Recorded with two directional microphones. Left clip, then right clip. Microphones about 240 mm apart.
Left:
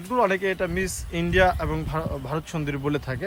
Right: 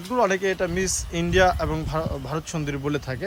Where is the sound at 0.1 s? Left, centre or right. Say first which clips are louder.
Even; centre.